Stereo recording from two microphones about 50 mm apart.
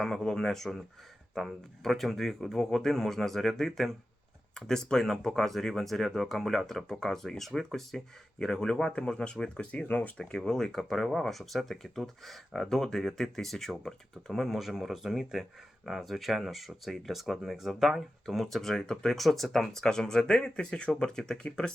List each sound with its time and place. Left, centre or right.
0.0 s speech: centre
9.8 s speech: left
10.2 s speech: centre